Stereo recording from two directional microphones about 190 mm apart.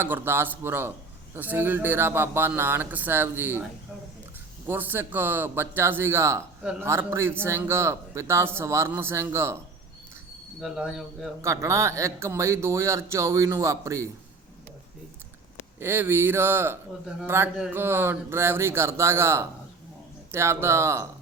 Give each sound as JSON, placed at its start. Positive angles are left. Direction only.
{"t": 0.0, "sound": "a man's voice", "side_deg": -10}
{"t": 4.6, "sound": "a man's voice", "side_deg": -10}
{"t": 10.6, "sound": "cricket", "side_deg": 0}
{"t": 11.4, "sound": "a man's voice", "side_deg": -15}
{"t": 15.8, "sound": "a man's voice", "side_deg": -10}